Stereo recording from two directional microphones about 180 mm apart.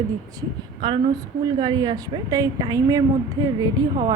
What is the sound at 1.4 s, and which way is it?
A woman's voice, 25° right (ahead or behind).